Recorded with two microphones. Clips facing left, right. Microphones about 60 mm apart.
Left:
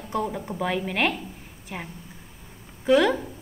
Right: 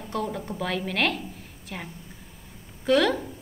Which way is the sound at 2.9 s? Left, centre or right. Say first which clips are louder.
Left 2 dB; centre.